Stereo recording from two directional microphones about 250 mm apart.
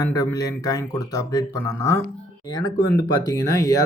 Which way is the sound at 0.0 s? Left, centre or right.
Centre.